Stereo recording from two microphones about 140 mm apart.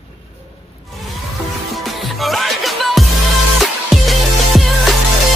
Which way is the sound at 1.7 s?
Centre (ahead or behind).